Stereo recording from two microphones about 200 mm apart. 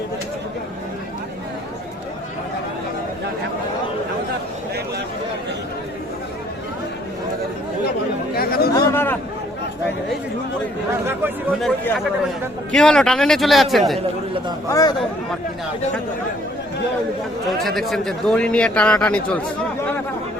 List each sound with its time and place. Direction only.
8.4 s chatter: 50° left (ahead or behind)
8.7 s a sound: 10° left (ahead or behind)
11.0 s a sound: 10° right (ahead or behind)
11.6 s a man's voice: centre (ahead or behind)
14.7 s speech: 15° left (ahead or behind)
17.6 s a man's voice: centre (ahead or behind)